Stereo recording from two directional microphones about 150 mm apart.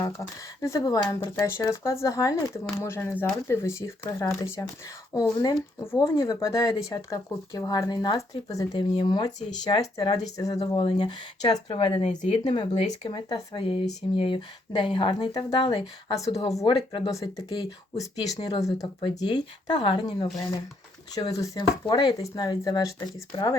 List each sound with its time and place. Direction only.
0.0 s speech: 20° left (ahead or behind)
16.6 s speech: 35° left (ahead or behind)
17.1 s speech: 20° left (ahead or behind)